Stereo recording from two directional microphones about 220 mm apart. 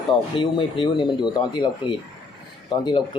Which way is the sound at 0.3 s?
20° left (ahead or behind).